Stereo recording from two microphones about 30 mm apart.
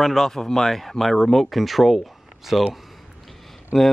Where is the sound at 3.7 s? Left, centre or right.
Centre.